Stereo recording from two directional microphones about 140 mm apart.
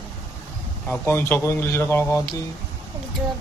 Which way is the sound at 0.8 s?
15° left (ahead or behind).